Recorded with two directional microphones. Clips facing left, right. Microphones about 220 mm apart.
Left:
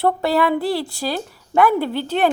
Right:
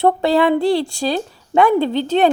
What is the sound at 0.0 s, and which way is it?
A woman's voice, 25° right (ahead or behind).